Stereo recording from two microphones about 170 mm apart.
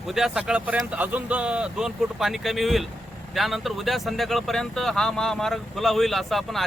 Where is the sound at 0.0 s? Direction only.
Centre (ahead or behind).